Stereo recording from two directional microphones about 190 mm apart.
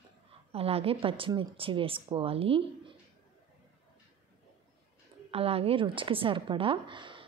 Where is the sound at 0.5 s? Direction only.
30° right (ahead or behind).